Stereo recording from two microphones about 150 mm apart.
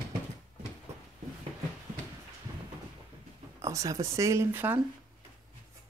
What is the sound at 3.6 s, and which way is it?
Speech, 20° right (ahead or behind).